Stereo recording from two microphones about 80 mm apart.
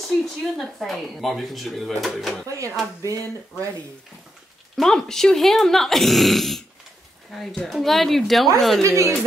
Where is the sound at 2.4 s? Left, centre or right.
Right.